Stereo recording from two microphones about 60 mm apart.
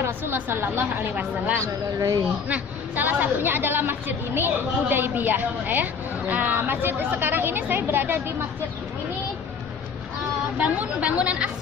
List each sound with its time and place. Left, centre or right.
0.0 s speech: right
1.6 s speech: right
2.5 s speech: right
6.5 s speech: right
10.6 s a woman's voice: right